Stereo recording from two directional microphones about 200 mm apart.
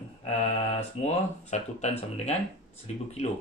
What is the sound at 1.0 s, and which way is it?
Speech, 35° left (ahead or behind).